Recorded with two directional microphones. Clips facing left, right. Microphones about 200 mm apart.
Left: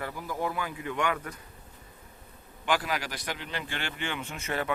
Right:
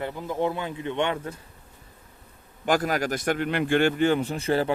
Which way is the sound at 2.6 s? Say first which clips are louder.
Right 6 dB; 45° right (ahead or behind).